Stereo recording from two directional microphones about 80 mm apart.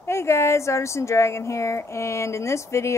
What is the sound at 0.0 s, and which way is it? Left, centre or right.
Speech, left.